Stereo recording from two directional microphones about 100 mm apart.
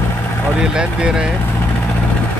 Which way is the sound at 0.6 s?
10° right (ahead or behind).